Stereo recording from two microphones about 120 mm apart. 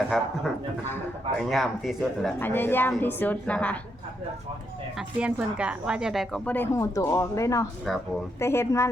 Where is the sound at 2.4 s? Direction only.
20° left (ahead or behind).